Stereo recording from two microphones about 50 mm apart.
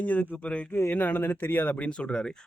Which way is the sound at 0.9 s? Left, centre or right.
Left.